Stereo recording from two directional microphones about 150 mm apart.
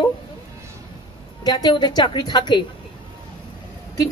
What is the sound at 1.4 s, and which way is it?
Speech, 25° left (ahead or behind).